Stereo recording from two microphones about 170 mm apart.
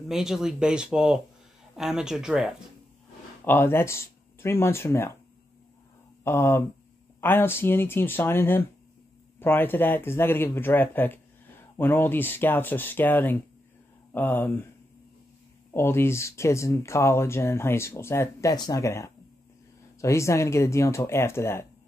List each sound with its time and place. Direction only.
0.1 s speech: 5° right (ahead or behind)
3.4 s speech: 10° left (ahead or behind)
6.2 s speech: 15° left (ahead or behind)
15.7 s speech: 15° left (ahead or behind)